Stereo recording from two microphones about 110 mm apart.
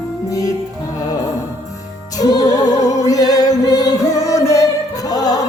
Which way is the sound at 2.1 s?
35° left (ahead or behind).